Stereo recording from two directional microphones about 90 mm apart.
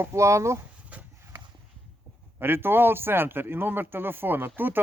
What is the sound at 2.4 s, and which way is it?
Speech, 25° right (ahead or behind).